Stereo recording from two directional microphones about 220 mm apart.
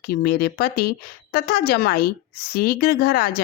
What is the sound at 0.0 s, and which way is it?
A woman's voice, 45° left (ahead or behind).